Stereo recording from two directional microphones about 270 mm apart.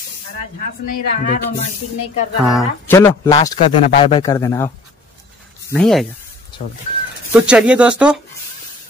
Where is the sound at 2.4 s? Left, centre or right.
Centre.